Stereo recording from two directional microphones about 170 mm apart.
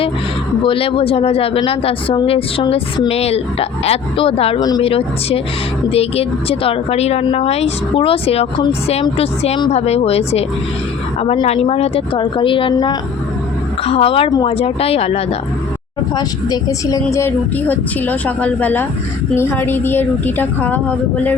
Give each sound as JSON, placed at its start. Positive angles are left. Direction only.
{"t": 0.6, "sound": "a woman's voice", "side_deg": 30}
{"t": 16.1, "sound": "a woman's voice", "side_deg": 20}